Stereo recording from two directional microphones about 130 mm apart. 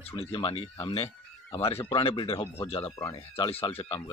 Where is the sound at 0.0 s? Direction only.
50° left (ahead or behind).